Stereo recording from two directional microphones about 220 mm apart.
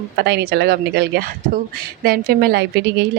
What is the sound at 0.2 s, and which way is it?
A woman's voice, 45° right (ahead or behind).